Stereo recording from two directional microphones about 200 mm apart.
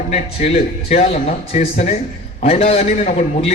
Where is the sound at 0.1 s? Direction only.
35° left (ahead or behind).